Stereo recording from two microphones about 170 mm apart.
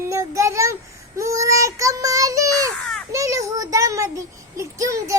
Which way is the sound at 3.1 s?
20° right (ahead or behind).